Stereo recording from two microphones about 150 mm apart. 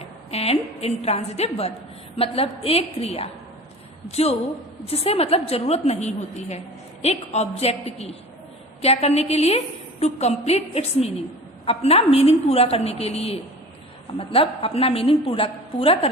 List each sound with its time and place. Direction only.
0.3 s a woman's voice: 40° left (ahead or behind)